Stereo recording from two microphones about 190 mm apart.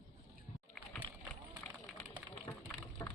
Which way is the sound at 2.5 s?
20° left (ahead or behind).